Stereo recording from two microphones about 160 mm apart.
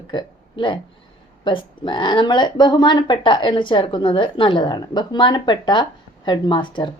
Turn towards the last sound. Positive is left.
turn(degrees=30)  # may be behind; listen again after turning